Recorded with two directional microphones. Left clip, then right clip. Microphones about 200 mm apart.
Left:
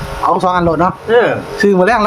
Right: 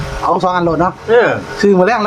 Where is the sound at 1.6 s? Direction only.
15° left (ahead or behind).